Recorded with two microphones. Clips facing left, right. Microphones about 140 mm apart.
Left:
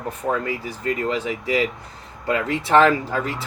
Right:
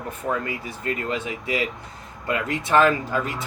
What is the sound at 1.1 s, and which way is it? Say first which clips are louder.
Speech: left 4 dB; 30° left (ahead or behind).